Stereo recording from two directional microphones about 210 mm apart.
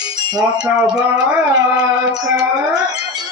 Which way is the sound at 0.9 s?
5° right (ahead or behind).